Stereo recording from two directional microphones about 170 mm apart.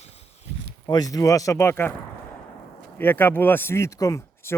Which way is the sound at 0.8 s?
20° left (ahead or behind).